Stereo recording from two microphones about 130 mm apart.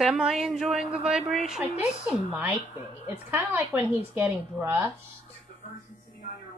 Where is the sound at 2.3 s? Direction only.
15° right (ahead or behind).